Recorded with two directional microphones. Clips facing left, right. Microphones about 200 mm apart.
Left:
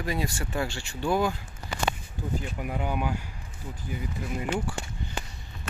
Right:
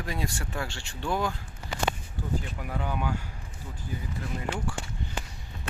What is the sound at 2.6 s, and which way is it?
Speech, 15° left (ahead or behind).